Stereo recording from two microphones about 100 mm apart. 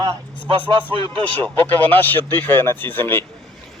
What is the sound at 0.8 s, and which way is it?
Speech, 55° right (ahead or behind).